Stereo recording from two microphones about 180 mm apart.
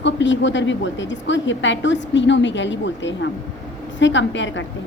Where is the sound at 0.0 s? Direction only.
85° left.